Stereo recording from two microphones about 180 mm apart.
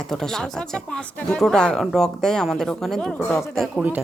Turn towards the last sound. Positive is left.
turn(degrees=0)  # may be behind; listen again after turning